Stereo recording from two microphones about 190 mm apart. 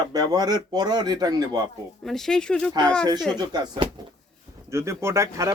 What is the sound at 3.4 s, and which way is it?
Speech, 20° right (ahead or behind).